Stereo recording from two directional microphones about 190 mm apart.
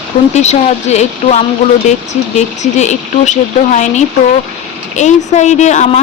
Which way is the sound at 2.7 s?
35° left (ahead or behind).